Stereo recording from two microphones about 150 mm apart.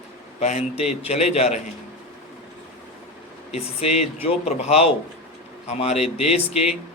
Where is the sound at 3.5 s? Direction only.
45° left (ahead or behind).